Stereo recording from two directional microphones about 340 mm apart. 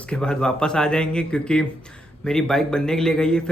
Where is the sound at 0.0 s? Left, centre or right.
Centre.